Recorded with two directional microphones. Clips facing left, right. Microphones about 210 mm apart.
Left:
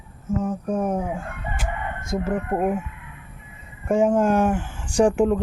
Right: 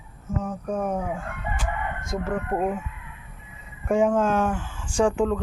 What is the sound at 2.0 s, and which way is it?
Speech, 5° left (ahead or behind).